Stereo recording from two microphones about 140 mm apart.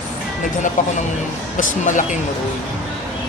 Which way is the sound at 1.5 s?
70° left (ahead or behind).